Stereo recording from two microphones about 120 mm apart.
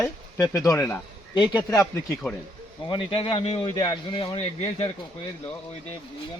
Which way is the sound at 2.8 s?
45° left (ahead or behind).